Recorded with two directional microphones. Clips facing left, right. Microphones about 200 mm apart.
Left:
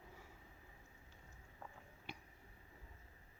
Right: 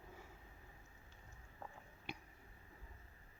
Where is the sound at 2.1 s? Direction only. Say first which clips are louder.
Right 3 dB; 15° right (ahead or behind).